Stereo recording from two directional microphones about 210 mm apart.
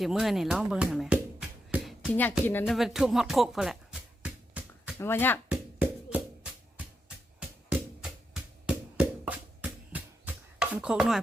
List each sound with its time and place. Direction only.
0.0 s speech: centre (ahead or behind)
2.7 s music: centre (ahead or behind)
4.9 s speech: 10° left (ahead or behind)
6.1 s music: 5° right (ahead or behind)